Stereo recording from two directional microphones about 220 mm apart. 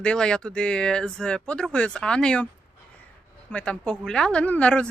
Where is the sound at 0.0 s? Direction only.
5° left (ahead or behind).